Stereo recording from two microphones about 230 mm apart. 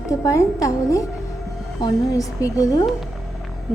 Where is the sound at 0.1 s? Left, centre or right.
Centre.